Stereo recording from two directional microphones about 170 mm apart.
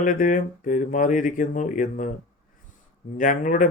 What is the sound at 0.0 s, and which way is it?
Speech, 50° left (ahead or behind).